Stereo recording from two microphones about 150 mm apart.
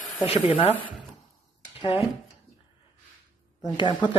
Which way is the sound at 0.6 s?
35° left (ahead or behind).